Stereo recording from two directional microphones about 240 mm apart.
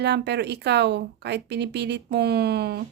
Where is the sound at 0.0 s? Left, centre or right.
Right.